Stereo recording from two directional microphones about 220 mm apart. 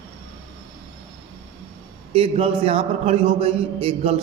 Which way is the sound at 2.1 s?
25° right (ahead or behind).